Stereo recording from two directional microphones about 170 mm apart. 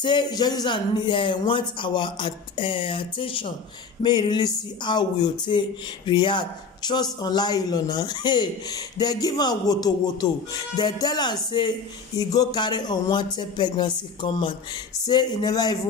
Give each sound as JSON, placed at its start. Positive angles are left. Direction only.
{"t": 0.0, "sound": "a man's voice", "side_deg": 25}